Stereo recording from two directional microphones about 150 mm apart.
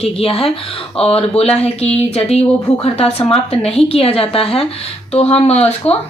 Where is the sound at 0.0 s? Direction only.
40° left (ahead or behind).